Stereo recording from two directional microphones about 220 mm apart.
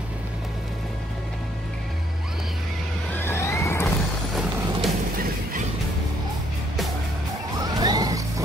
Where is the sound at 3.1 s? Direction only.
10° left (ahead or behind).